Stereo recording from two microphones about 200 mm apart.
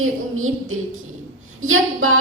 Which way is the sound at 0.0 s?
90° right.